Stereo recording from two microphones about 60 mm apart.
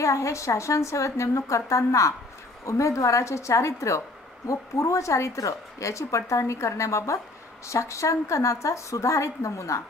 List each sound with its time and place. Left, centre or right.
0.0 s speech: left